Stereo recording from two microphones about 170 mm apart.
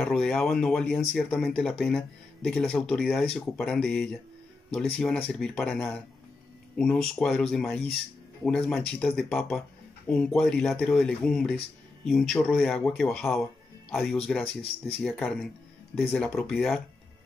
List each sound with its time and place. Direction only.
0.0 s speech: centre (ahead or behind)
2.6 s speech: 10° left (ahead or behind)
3.0 s speech: 5° right (ahead or behind)
14.4 s speech: 35° left (ahead or behind)
15.0 s speech: 5° left (ahead or behind)